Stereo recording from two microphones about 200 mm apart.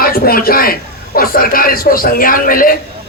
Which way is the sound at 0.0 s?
45° left (ahead or behind).